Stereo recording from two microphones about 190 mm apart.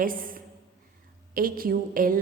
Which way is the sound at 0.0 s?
45° right (ahead or behind).